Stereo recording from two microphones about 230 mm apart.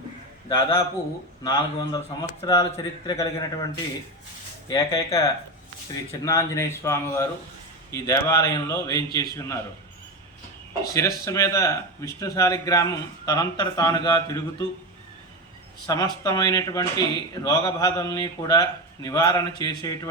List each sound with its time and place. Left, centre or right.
0.4 s a man's voice: centre
4.7 s speech: centre
10.9 s speech: centre
15.9 s speech: centre